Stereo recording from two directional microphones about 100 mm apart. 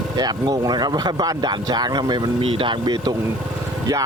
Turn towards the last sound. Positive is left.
turn(degrees=-40)  # may be behind; listen again after turning